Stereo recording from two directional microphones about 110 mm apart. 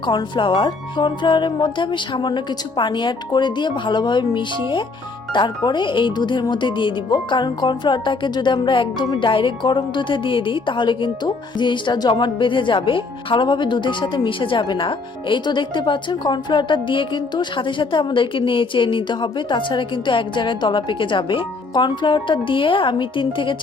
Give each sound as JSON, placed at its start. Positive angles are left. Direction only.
{"t": 0.0, "sound": "a woman's voice", "side_deg": 45}